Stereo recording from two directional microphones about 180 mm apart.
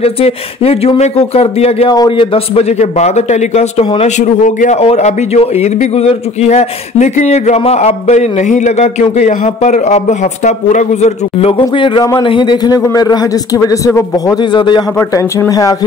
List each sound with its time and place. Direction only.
0.0 s a man's voice: 35° left (ahead or behind); by 15.7 s 15° left (ahead or behind)